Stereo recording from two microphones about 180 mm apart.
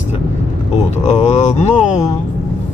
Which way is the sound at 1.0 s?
40° left (ahead or behind).